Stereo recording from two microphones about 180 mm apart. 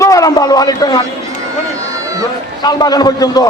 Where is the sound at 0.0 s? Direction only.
20° left (ahead or behind).